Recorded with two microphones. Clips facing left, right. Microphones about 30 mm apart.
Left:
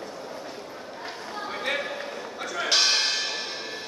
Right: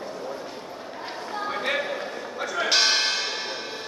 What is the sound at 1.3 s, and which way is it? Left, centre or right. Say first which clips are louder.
Church bell: right 3 dB; centre.